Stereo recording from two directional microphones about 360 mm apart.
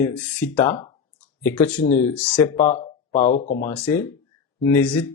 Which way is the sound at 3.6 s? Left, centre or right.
Centre.